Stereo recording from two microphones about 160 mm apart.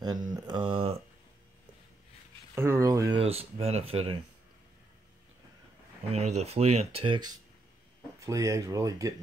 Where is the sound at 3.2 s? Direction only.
40° right (ahead or behind).